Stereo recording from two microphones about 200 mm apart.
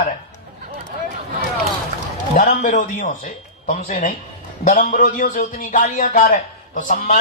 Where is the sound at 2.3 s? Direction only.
40° left (ahead or behind).